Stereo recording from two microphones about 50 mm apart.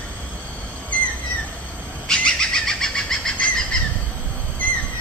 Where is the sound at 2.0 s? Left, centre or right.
Centre.